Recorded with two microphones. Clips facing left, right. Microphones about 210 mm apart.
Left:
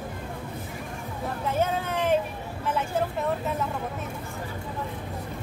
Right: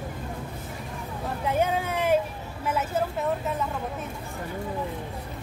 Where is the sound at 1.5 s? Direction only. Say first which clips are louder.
Right 2 dB; 15° right (ahead or behind).